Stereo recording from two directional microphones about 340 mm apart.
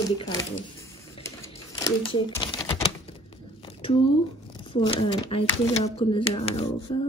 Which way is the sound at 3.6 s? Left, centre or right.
Centre.